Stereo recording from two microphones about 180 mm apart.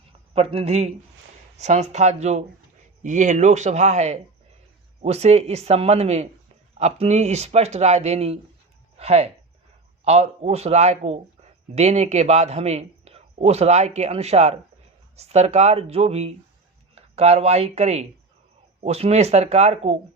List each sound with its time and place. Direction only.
0.3 s a man's voice: 35° right (ahead or behind)